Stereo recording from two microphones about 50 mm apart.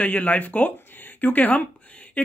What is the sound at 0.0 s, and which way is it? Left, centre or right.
Speech, left.